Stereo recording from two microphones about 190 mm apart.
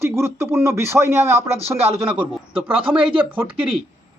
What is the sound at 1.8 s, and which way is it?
Speech, 30° right (ahead or behind).